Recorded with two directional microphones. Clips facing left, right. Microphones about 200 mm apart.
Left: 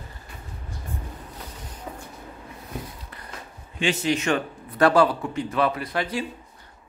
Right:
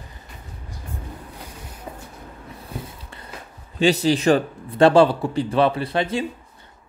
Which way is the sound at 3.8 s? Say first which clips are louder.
Right 6 dB; 35° right (ahead or behind).